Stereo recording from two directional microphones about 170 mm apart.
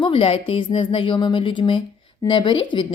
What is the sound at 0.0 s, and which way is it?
A woman's voice, 30° left (ahead or behind).